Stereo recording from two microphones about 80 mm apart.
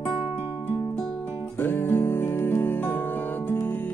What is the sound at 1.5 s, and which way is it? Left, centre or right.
Music, left.